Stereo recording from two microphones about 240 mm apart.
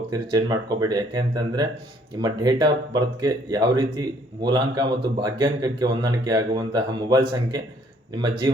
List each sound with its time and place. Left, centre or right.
0.1 s a man's voice: centre